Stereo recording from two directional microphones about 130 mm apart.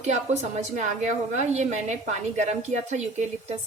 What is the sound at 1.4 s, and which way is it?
A woman's voice, 60° right (ahead or behind).